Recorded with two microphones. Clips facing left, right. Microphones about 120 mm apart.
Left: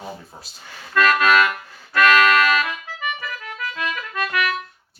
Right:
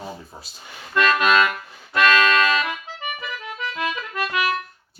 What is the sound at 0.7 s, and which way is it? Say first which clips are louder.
Music: left 2 dB; 25° right (ahead or behind).